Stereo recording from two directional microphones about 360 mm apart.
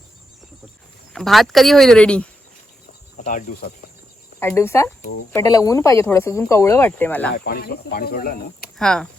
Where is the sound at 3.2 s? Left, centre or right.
Left.